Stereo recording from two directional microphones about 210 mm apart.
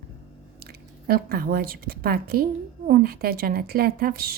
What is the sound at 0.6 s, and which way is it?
A woman's voice, 45° right (ahead or behind).